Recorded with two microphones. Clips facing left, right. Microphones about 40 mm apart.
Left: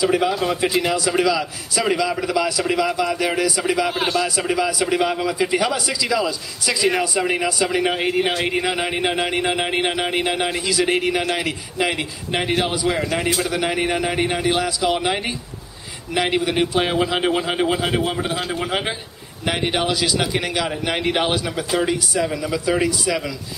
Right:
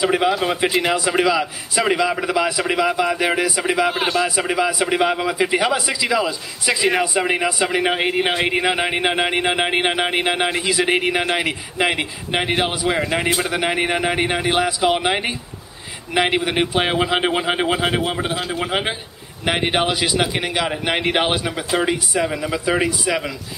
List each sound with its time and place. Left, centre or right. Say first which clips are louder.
0.0 s a man's voice: right 1 dB; right
3.9 s a man's voice: right 1 dB; centre
4.4 s a man's voice: right 1 dB; right
19.4 s a man's voice: right 2 dB; right